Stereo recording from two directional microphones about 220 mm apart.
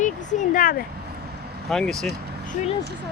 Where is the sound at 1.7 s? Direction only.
Centre (ahead or behind).